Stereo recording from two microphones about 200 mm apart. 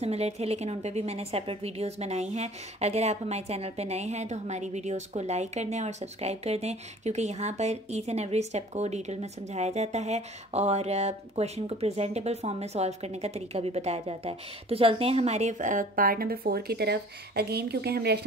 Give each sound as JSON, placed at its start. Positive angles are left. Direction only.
{"t": 0.0, "sound": "a woman's voice", "side_deg": -30}